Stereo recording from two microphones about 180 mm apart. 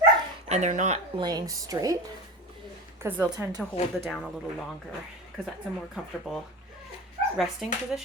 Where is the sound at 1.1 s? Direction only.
20° right (ahead or behind).